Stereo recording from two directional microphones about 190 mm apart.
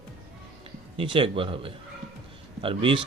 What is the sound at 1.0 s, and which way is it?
Speech, 25° right (ahead or behind).